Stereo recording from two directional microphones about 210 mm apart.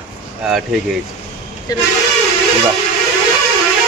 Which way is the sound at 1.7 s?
15° left (ahead or behind).